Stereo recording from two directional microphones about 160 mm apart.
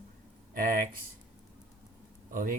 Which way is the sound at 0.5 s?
60° right (ahead or behind).